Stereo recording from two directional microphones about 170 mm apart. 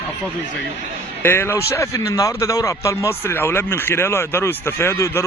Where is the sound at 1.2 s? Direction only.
15° left (ahead or behind).